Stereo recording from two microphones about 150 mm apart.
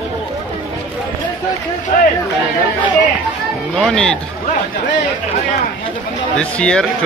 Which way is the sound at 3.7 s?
Centre (ahead or behind).